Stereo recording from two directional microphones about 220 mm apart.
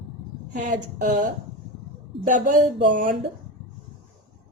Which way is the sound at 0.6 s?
35° right (ahead or behind).